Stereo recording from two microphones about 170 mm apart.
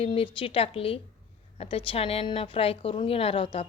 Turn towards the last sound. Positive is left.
turn(degrees=35)  # may be behind; listen again after turning